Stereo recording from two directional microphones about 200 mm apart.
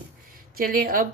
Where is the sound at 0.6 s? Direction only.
45° right (ahead or behind).